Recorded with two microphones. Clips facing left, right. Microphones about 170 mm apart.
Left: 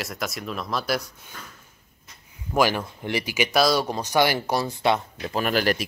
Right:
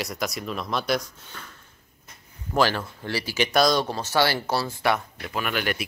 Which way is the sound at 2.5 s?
15° left (ahead or behind).